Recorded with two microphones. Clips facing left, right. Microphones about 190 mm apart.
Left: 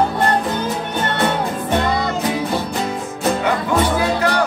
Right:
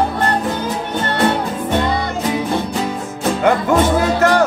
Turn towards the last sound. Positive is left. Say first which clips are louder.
# right 4 dB
turn(degrees=-45)  # may be behind; listen again after turning